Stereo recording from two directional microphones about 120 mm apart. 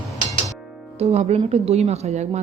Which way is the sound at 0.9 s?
65° right (ahead or behind).